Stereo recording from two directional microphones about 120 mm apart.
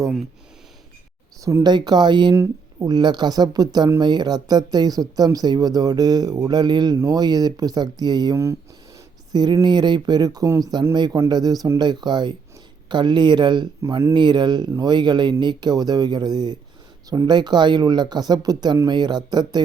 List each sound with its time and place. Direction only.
1.4 s speech: 25° right (ahead or behind)
1.7 s speech: 35° right (ahead or behind)
2.3 s speech: 25° right (ahead or behind)